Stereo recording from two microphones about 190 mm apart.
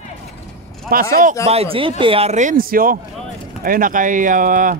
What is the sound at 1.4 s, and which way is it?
Speech, 30° right (ahead or behind).